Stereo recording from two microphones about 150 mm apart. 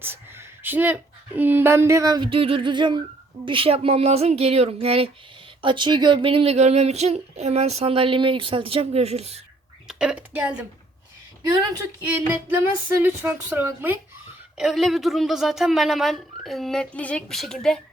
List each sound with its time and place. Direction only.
0.0 s speech: 15° right (ahead or behind); by 9.4 s 45° right (ahead or behind)
9.8 s a woman's voice: 5° right (ahead or behind)
12.0 s speech: 15° right (ahead or behind)
14.6 s speech: centre (ahead or behind)